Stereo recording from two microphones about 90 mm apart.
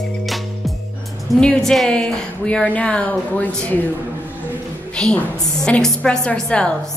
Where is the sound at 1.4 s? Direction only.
10° left (ahead or behind).